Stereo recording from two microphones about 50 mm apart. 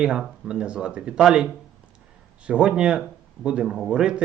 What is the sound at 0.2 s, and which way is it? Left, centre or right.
Speech, centre.